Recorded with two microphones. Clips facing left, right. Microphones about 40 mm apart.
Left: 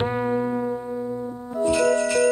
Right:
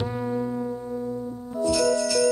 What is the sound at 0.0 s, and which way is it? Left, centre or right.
Music, left.